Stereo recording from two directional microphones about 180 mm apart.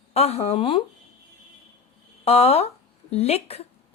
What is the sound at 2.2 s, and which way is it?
Speech, 35° left (ahead or behind).